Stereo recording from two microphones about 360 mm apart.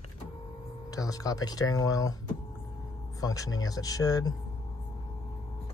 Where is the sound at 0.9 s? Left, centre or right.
Centre.